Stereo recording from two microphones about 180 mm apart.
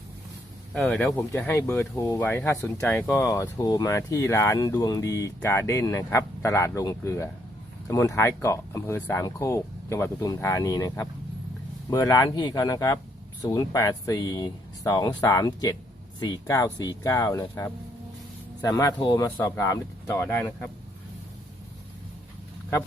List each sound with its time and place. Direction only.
0.7 s speech: 10° left (ahead or behind)